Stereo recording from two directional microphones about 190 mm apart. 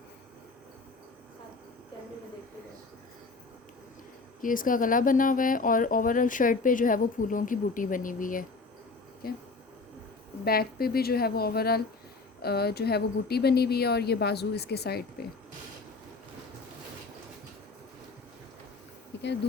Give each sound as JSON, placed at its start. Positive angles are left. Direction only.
{"t": 4.4, "sound": "speech", "side_deg": 45}
{"t": 10.4, "sound": "a woman's voice", "side_deg": 55}